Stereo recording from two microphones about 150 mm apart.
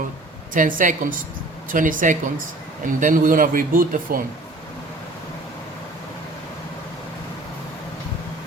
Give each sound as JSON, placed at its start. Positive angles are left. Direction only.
{"t": 0.5, "sound": "a woman's voice", "side_deg": -60}